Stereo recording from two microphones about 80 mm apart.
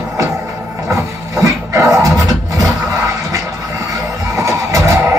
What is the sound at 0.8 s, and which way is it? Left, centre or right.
Music, right.